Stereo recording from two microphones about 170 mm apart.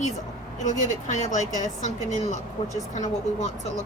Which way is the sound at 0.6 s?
45° left (ahead or behind).